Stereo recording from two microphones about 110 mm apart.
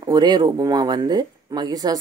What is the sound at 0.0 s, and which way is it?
Speech, 40° right (ahead or behind).